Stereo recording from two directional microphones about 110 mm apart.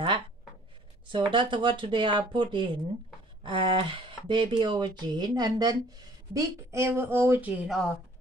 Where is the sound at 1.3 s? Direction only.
50° right (ahead or behind); by 7.5 s 20° right (ahead or behind).